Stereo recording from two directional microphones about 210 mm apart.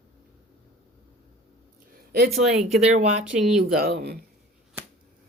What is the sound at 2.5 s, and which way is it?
Speech, 30° right (ahead or behind).